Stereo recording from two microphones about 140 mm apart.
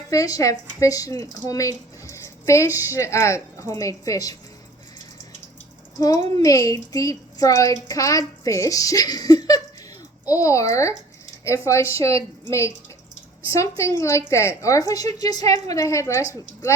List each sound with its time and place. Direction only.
0.1 s a woman's voice: 25° left (ahead or behind)
6.0 s a woman's voice: 25° left (ahead or behind)